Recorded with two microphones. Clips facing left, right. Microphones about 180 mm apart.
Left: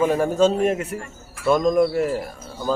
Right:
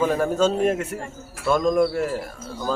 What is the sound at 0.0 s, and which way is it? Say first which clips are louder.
A man's voice: left 2 dB; 5° left (ahead or behind).